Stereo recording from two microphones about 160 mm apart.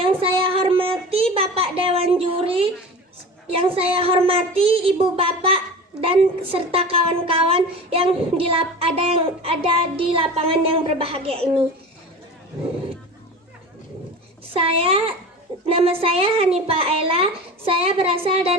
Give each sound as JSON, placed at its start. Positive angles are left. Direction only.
{"t": 0.0, "sound": "child singing", "side_deg": -35}
{"t": 3.5, "sound": "a woman's voice", "side_deg": -35}
{"t": 14.5, "sound": "a woman's voice", "side_deg": -35}